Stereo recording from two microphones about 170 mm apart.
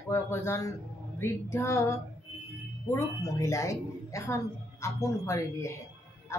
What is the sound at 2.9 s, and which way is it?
A woman's voice, 15° left (ahead or behind).